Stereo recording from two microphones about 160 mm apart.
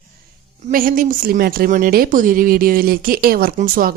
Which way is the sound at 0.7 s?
60° right (ahead or behind).